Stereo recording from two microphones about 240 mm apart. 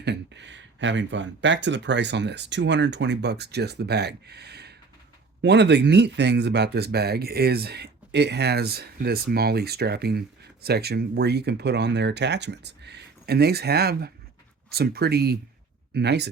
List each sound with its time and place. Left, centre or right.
0.0 s speech: right